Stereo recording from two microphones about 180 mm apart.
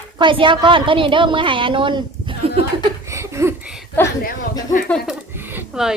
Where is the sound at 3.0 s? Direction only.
15° right (ahead or behind).